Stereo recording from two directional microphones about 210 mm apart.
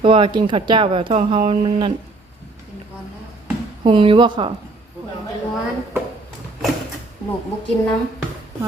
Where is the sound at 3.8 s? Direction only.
25° right (ahead or behind).